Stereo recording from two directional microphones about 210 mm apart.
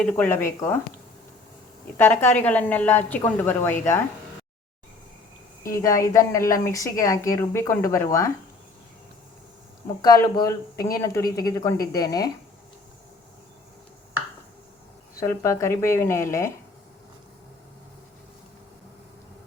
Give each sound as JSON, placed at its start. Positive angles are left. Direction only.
{"t": 0.0, "sound": "a woman's voice", "side_deg": 10}
{"t": 2.0, "sound": "a woman's voice", "side_deg": 10}
{"t": 5.6, "sound": "a woman's voice", "side_deg": 15}
{"t": 10.0, "sound": "a woman's voice", "side_deg": 20}
{"t": 15.2, "sound": "a woman's voice", "side_deg": 15}